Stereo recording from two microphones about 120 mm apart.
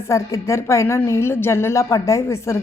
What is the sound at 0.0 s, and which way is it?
A woman's voice, 25° left (ahead or behind).